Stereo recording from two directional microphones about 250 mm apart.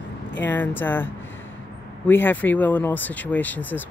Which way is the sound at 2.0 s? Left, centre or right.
Centre.